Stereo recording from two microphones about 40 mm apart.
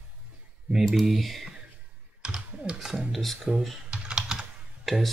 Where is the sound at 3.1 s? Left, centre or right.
Centre.